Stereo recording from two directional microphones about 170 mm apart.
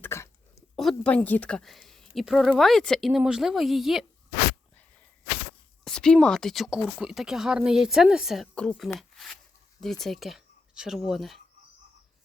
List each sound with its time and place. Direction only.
0.0 s a sound: 15° left (ahead or behind)
0.8 s a woman's voice: 5° left (ahead or behind)
5.8 s a sound: 5° left (ahead or behind)
6.2 s a woman's voice: 5° left (ahead or behind)
9.0 s zipper: centre (ahead or behind)
10.0 s speech: centre (ahead or behind)